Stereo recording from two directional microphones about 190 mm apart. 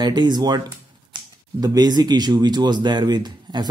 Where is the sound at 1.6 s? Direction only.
20° right (ahead or behind).